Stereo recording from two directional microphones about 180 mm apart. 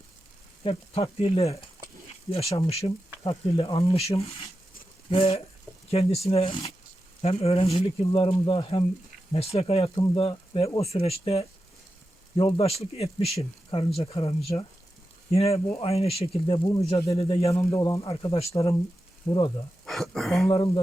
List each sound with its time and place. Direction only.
0.6 s speech: 30° left (ahead or behind)
2.6 s speech: 35° left (ahead or behind)
16.6 s speech: 25° left (ahead or behind)
17.2 s speech: 30° left (ahead or behind)
17.5 s speech: 15° left (ahead or behind)
19.8 s a sound: centre (ahead or behind)
20.5 s speech: 25° left (ahead or behind)